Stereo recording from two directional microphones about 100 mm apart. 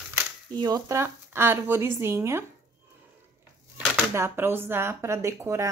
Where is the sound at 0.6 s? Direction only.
40° right (ahead or behind).